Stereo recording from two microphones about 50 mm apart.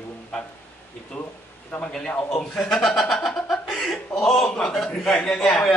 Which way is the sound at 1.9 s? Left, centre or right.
Centre.